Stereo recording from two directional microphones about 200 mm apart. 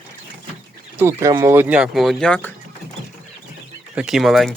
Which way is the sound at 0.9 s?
15° right (ahead or behind).